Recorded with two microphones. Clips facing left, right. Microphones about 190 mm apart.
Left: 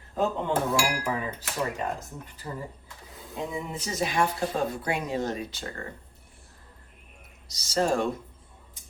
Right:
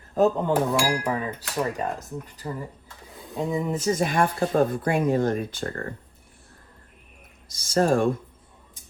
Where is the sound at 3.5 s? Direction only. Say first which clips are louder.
Right 9 dB; 45° right (ahead or behind).